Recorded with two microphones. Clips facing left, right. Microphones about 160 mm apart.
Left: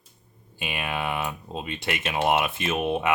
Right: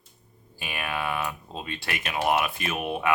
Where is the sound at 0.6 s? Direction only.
20° left (ahead or behind).